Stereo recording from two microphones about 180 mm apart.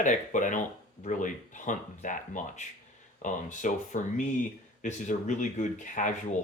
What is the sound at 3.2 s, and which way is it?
Speech, 45° left (ahead or behind).